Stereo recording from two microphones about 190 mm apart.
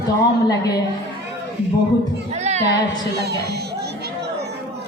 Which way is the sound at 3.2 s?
60° right (ahead or behind).